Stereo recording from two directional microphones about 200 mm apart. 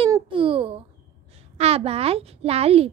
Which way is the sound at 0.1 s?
25° right (ahead or behind).